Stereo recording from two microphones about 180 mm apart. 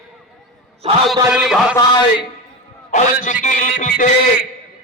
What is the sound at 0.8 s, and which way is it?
Speech, 30° right (ahead or behind).